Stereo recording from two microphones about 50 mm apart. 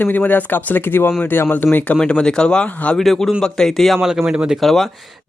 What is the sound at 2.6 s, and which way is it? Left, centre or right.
Speech, left.